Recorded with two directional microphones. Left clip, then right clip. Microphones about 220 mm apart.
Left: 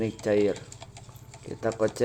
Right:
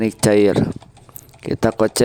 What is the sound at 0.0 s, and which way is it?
Speech, 55° right (ahead or behind).